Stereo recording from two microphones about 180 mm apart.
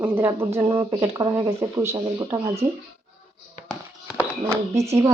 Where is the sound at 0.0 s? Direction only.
10° right (ahead or behind).